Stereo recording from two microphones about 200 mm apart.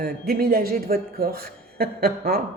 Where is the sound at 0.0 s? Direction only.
45° right (ahead or behind).